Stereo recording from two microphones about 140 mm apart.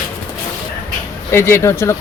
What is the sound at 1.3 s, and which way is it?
Speech, 15° left (ahead or behind).